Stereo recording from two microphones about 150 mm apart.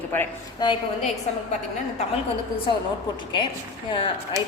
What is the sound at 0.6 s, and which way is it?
Speech, 30° left (ahead or behind).